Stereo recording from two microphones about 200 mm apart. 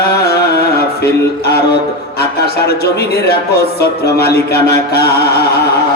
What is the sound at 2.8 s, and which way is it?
Speech, 50° left (ahead or behind).